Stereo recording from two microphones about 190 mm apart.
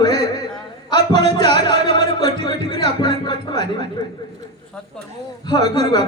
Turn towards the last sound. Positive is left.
turn(degrees=20)  # may be behind; listen again after turning